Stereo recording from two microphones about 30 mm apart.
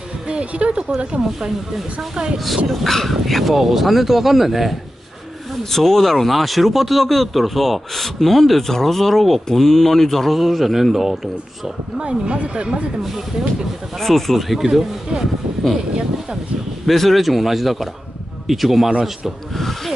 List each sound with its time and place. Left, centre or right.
0.3 s speech: right
1.8 s speech: centre
2.3 s speech: centre
2.7 s speech: centre
5.6 s speech: centre
10.3 s speech: centre
12.0 s speech: right
13.9 s speech: centre
15.9 s a sound: right
16.8 s speech: centre
19.5 s speech: centre